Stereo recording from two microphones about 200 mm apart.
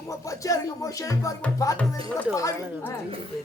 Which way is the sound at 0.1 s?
15° left (ahead or behind).